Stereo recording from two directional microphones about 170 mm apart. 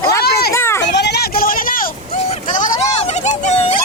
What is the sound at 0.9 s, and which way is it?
Vehicle, 80° left.